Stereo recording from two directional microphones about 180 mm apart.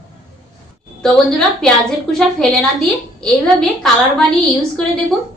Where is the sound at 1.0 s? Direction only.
5° left (ahead or behind).